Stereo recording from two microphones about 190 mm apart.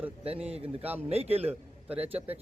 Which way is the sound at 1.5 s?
5° right (ahead or behind).